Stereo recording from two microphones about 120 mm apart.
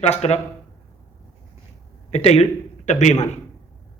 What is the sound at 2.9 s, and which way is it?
Speech, 75° left (ahead or behind).